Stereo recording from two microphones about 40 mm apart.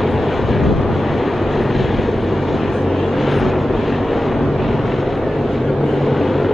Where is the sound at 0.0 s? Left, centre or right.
Centre.